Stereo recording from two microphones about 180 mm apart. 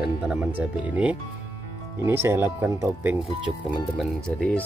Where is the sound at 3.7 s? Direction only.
5° left (ahead or behind).